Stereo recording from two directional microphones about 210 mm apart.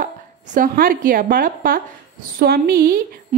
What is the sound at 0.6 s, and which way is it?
A woman's voice, 40° right (ahead or behind).